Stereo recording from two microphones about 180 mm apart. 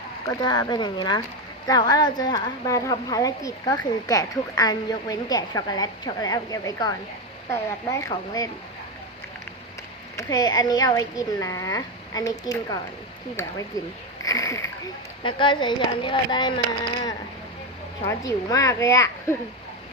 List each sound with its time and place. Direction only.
0.3 s a woman's voice: 20° left (ahead or behind)
10.2 s a woman's voice: 20° left (ahead or behind)
14.3 s a woman's voice: 20° left (ahead or behind)
15.2 s a woman's voice: 25° left (ahead or behind)